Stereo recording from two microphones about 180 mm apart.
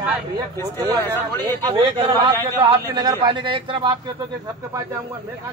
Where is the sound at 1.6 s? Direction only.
20° right (ahead or behind).